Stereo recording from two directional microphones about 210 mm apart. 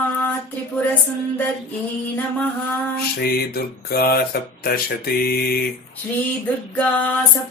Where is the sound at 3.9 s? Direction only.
45° left (ahead or behind).